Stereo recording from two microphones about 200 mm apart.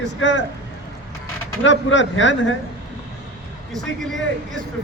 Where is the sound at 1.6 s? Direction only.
65° left (ahead or behind).